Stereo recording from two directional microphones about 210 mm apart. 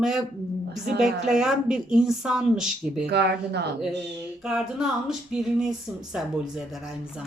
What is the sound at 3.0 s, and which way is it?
Speech, 50° right (ahead or behind).